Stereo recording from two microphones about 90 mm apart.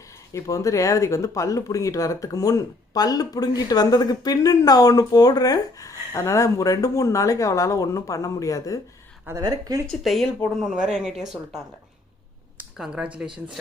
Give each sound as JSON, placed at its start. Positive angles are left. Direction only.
{"t": 0.3, "sound": "speech", "side_deg": 40}
{"t": 9.4, "sound": "speech", "side_deg": -40}
{"t": 9.9, "sound": "speech", "side_deg": 0}
{"t": 12.7, "sound": "speech", "side_deg": -5}